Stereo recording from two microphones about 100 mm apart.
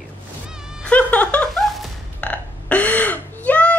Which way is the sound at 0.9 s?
15° left (ahead or behind).